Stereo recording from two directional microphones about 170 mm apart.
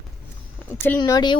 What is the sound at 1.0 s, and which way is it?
Speech, 25° left (ahead or behind).